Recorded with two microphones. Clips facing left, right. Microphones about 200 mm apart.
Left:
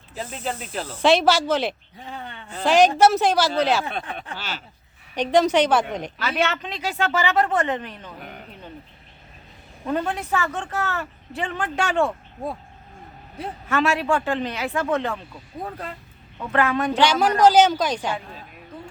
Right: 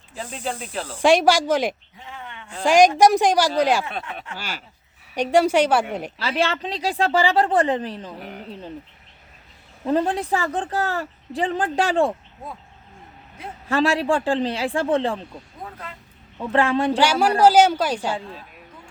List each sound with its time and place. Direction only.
0.1 s speech: 5° left (ahead or behind)
0.9 s a woman's voice: 10° right (ahead or behind)
2.0 s a sound: 35° left (ahead or behind)
2.5 s a woman's voice: 10° right (ahead or behind)
6.1 s a woman's voice: 30° right (ahead or behind)
9.8 s a woman's voice: 30° right (ahead or behind)
13.7 s a woman's voice: 30° right (ahead or behind)
16.5 s speech: 30° right (ahead or behind)
17.0 s a woman's voice: 10° right (ahead or behind)